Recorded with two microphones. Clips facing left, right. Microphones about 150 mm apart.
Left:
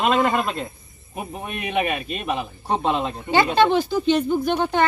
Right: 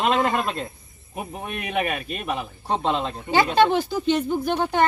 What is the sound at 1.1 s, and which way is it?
Speech, 5° left (ahead or behind).